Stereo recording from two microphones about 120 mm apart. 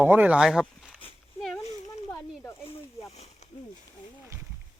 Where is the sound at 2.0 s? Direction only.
20° left (ahead or behind).